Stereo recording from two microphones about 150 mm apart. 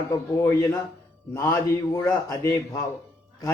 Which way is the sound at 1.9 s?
20° left (ahead or behind).